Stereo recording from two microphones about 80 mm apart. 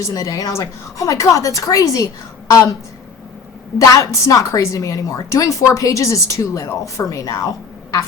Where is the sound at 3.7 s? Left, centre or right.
Left.